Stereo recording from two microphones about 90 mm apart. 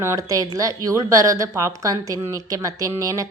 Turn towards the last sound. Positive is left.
turn(degrees=-40)  # may be behind; listen again after turning